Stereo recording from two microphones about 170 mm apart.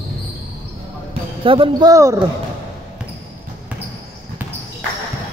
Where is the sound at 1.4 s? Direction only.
30° right (ahead or behind).